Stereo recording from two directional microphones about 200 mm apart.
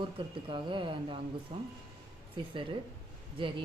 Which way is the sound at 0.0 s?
25° right (ahead or behind).